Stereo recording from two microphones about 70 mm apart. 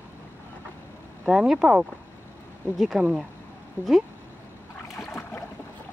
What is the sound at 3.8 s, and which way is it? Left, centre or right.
Speech, left.